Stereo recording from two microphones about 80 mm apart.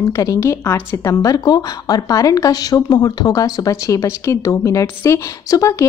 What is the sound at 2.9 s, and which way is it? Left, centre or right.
A woman's voice, left.